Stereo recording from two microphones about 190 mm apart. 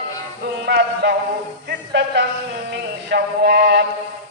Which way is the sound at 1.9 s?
65° right (ahead or behind).